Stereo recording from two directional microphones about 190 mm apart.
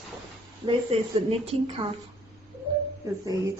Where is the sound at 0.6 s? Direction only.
30° right (ahead or behind).